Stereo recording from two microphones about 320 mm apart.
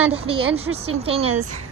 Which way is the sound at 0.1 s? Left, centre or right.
Centre.